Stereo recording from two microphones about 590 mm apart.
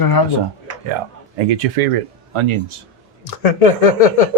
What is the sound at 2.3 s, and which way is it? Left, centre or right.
Speech, right.